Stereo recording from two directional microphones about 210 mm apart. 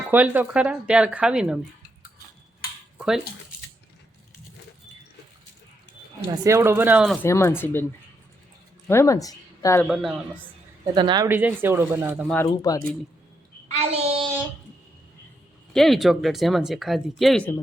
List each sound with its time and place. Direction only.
0.1 s speech: 5° right (ahead or behind)
6.2 s speech: 15° right (ahead or behind)
7.2 s speech: 10° left (ahead or behind)
8.9 s speech: 15° left (ahead or behind)
9.8 s speech: centre (ahead or behind)
10.9 s speech: 20° right (ahead or behind)
11.3 s speech: 10° right (ahead or behind)
12.3 s speech: 15° left (ahead or behind)
13.7 s child singing: 30° right (ahead or behind)
15.7 s speech: centre (ahead or behind)